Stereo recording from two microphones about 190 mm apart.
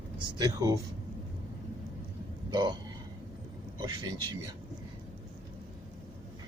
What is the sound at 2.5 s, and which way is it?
Speech, 20° right (ahead or behind).